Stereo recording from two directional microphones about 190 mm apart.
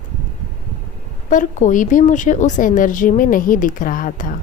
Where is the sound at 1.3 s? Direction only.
40° left (ahead or behind).